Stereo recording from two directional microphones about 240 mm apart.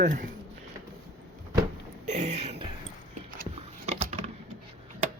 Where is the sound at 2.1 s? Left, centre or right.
Right.